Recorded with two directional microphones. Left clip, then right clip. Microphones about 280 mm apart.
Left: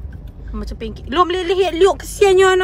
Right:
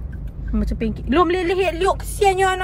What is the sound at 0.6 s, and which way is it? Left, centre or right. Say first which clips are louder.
Speech: right 3 dB; centre.